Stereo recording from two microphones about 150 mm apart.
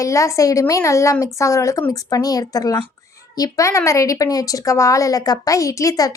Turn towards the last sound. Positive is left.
turn(degrees=20)  # may be behind; listen again after turning